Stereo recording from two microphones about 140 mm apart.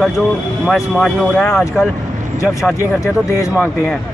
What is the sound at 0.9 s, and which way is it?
Speech, centre (ahead or behind).